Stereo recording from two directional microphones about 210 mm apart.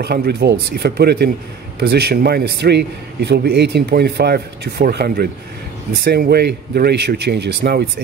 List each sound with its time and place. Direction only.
0.0 s a man's voice: 50° right (ahead or behind)